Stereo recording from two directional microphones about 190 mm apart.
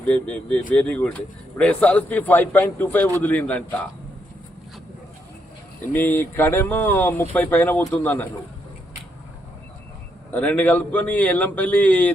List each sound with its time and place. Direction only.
0.0 s speech: 10° left (ahead or behind)
5.8 s speech: 10° left (ahead or behind)
10.3 s speech: 10° left (ahead or behind)